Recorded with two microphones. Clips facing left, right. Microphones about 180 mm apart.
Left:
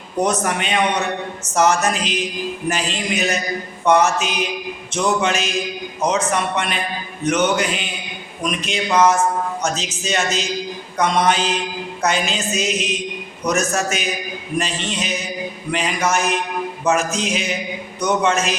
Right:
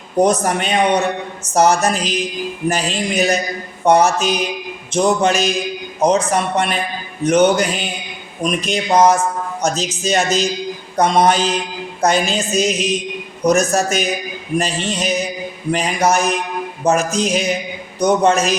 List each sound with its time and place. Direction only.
0.2 s a woman's voice: 35° right (ahead or behind)